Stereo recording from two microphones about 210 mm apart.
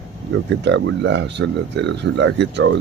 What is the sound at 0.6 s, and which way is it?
Speech, 55° right (ahead or behind).